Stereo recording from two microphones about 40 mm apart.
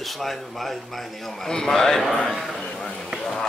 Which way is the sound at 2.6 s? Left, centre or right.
Left.